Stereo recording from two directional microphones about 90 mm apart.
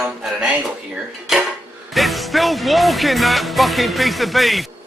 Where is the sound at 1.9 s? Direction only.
Centre (ahead or behind).